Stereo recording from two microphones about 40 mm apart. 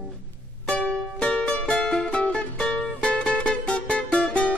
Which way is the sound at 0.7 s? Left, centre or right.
Left.